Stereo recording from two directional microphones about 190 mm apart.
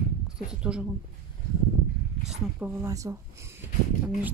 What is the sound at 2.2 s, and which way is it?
Speech, 10° right (ahead or behind).